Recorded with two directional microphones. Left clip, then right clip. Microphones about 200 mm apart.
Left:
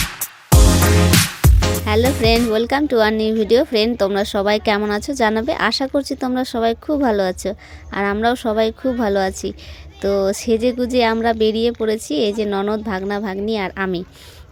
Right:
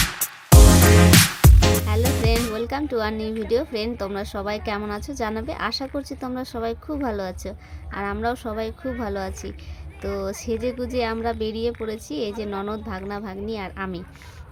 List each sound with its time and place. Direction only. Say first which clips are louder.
0.0 s music: even; centre (ahead or behind)
2.0 s speech: left 7 dB; centre (ahead or behind)
2.5 s a woman's voice: left 9 dB; 40° left (ahead or behind)